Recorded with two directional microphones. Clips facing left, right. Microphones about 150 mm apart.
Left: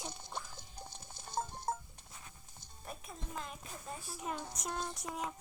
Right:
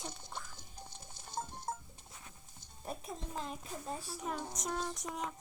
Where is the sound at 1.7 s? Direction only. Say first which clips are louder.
Left 4 dB; 70° left (ahead or behind).